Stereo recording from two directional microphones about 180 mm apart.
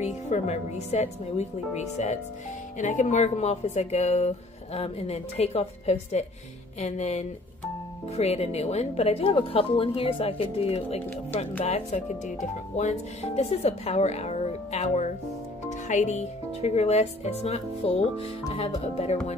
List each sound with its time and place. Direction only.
0.0 s speech: 40° left (ahead or behind)